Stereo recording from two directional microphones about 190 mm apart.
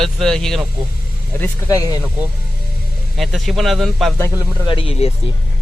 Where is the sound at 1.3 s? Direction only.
15° left (ahead or behind).